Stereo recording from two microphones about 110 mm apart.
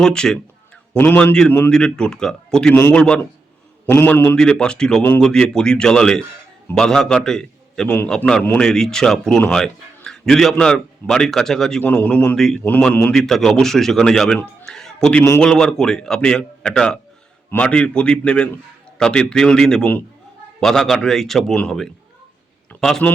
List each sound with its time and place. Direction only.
0.0 s a man's voice: 5° left (ahead or behind)
4.4 s a man's voice: 5° left (ahead or behind)